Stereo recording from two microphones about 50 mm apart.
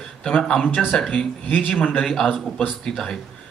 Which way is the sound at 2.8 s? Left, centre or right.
Centre.